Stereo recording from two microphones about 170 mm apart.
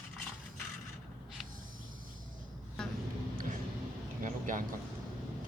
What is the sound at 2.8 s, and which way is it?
Vehicle, 5° left (ahead or behind).